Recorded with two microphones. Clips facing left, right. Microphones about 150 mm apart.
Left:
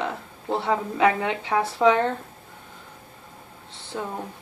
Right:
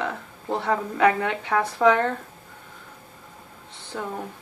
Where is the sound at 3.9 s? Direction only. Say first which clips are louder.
Left 1 dB; 20° left (ahead or behind).